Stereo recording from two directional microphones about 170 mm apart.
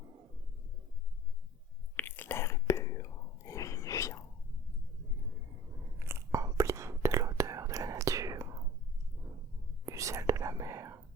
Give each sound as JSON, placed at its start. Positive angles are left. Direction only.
{"t": 2.0, "sound": "whispering", "side_deg": 10}
{"t": 6.0, "sound": "whispering", "side_deg": -15}
{"t": 9.8, "sound": "whispering", "side_deg": -20}